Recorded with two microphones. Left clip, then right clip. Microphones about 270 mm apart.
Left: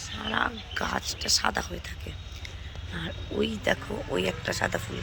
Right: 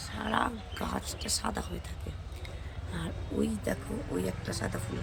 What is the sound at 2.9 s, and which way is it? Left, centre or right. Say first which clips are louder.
Speech: left 4 dB; centre.